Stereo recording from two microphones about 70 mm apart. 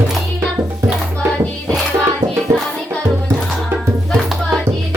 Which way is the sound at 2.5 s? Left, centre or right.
Right.